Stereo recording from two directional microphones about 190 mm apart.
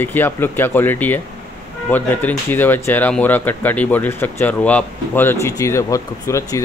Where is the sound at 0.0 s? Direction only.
10° left (ahead or behind).